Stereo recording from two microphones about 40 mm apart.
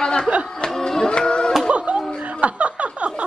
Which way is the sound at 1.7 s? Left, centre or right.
Right.